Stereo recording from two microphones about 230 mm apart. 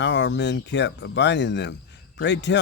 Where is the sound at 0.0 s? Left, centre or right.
Left.